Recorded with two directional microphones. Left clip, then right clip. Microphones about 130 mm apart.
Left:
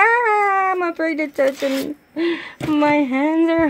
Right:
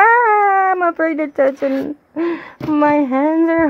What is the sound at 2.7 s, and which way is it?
Speech, 30° right (ahead or behind).